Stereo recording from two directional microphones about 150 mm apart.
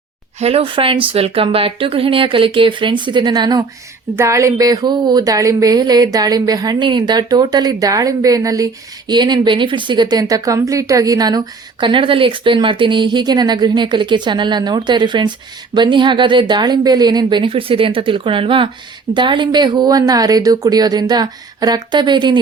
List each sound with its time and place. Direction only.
0.3 s speech: 40° right (ahead or behind)